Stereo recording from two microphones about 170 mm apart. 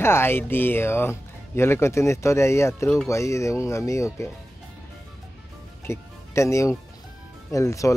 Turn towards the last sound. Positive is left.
turn(degrees=20)  # may be behind; listen again after turning